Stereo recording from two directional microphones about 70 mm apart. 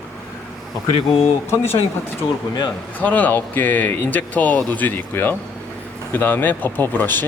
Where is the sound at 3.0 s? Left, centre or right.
Left.